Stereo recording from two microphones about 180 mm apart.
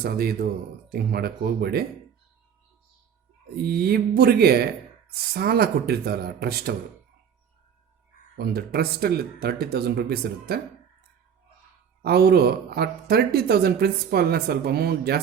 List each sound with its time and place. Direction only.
0.0 s speech: 60° right (ahead or behind)
3.7 s speech: 60° right (ahead or behind)
8.4 s speech: 60° right (ahead or behind)
12.0 s speech: 60° right (ahead or behind)